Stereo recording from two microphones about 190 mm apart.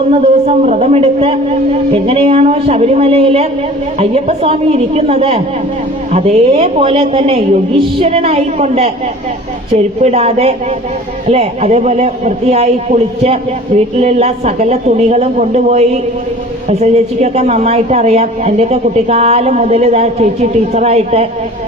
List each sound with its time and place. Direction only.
0.1 s a man's voice: 35° right (ahead or behind)